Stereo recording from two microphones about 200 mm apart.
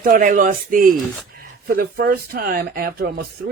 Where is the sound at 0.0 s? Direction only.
45° right (ahead or behind).